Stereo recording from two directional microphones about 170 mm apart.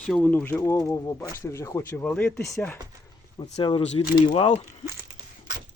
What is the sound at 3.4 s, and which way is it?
Speech, 40° left (ahead or behind).